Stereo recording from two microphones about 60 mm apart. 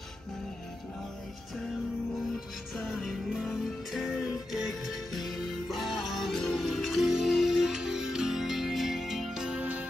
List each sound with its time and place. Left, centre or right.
2.8 s music: centre
9.6 s music: right